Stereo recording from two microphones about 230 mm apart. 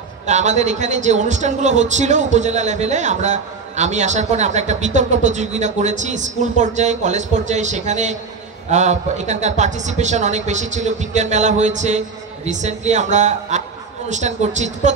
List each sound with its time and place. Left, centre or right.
0.3 s speech: right